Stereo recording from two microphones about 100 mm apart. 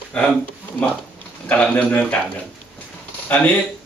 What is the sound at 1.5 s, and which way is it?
Speech, 15° left (ahead or behind).